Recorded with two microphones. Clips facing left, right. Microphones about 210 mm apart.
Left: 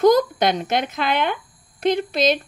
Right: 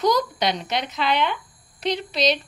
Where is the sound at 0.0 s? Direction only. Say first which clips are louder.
Left 6 dB; 50° left (ahead or behind).